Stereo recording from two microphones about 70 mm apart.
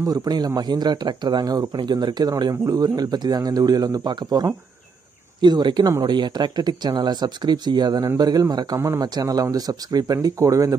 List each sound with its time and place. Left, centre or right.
0.1 s a man's voice: right
0.6 s speech: right
2.6 s a man's voice: right
5.4 s speech: right
8.2 s a man's voice: right
8.7 s speech: right
9.0 s speech: right